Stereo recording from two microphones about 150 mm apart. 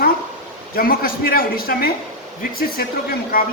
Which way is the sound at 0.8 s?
75° left (ahead or behind).